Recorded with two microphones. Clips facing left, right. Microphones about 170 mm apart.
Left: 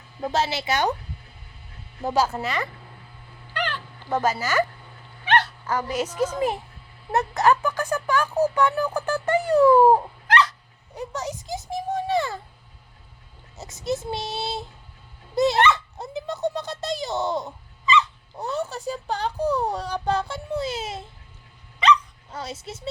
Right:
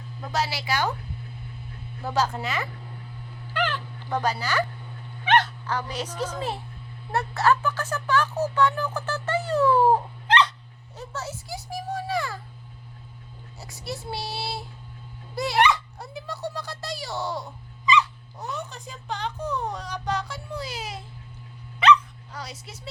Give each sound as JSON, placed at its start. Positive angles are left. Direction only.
{"t": 0.3, "sound": "a child's voice", "side_deg": 25}
{"t": 2.0, "sound": "speech", "side_deg": 15}
{"t": 3.5, "sound": "dog", "side_deg": -10}
{"t": 4.0, "sound": "speech", "side_deg": 5}
{"t": 5.4, "sound": "a sound", "side_deg": 10}
{"t": 6.1, "sound": "speech", "side_deg": 10}
{"t": 10.2, "sound": "dog", "side_deg": -30}
{"t": 10.9, "sound": "a child's voice", "side_deg": 15}
{"t": 13.6, "sound": "a child's voice", "side_deg": 20}
{"t": 16.0, "sound": "a sound", "side_deg": 20}
{"t": 18.3, "sound": "speech", "side_deg": 35}
{"t": 22.3, "sound": "a child's voice", "side_deg": 25}